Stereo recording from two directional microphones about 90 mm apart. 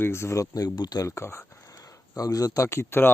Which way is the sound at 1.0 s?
30° left (ahead or behind).